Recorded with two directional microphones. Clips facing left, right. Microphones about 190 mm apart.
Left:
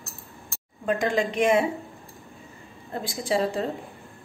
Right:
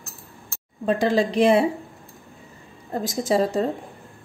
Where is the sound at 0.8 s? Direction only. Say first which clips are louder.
Right 4 dB; 35° right (ahead or behind).